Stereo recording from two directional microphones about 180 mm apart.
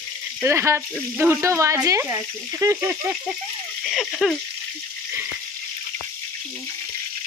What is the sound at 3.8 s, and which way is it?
Speech, centre (ahead or behind).